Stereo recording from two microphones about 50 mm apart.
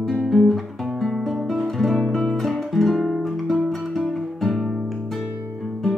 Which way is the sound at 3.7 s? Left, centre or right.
Centre.